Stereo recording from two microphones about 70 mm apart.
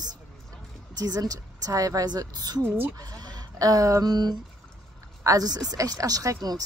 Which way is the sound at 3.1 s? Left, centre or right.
Right.